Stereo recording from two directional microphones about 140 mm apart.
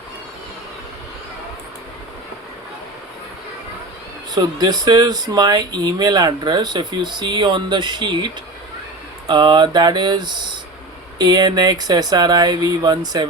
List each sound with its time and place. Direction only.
4.4 s speech: 30° right (ahead or behind)